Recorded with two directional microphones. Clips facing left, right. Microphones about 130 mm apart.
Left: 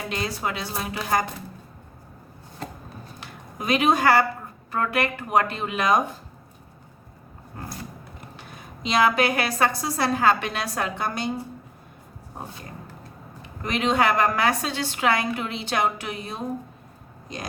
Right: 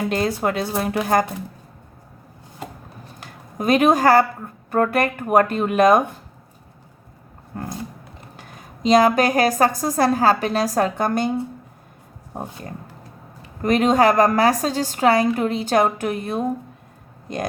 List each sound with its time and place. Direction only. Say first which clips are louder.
0.1 s speech: right 7 dB; 50° right (ahead or behind)
3.2 s speech: right 7 dB; 45° right (ahead or behind)
8.4 s a woman's voice: right 9 dB; 45° right (ahead or behind)
13.6 s a woman's voice: right 6 dB; 45° right (ahead or behind)